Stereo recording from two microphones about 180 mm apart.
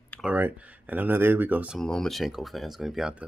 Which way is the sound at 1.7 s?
5° left (ahead or behind).